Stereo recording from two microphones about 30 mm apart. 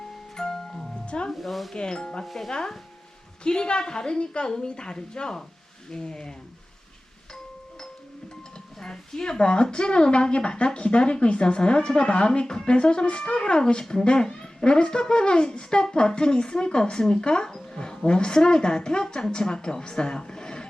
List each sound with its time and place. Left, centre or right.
0.3 s music: centre
1.0 s speech: left
1.3 s speech: centre
1.7 s a woman's voice: left
2.2 s speech: centre
3.4 s a woman's voice: left
8.8 s speech: left
9.4 s a child's voice: left